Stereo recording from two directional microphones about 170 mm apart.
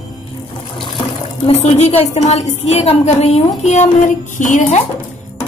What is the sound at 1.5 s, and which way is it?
A woman's voice, 40° left (ahead or behind).